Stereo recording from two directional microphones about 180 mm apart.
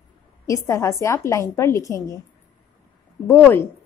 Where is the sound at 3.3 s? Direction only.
15° left (ahead or behind).